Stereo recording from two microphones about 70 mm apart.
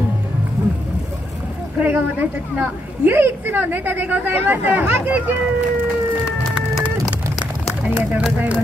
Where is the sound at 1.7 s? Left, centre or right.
Right.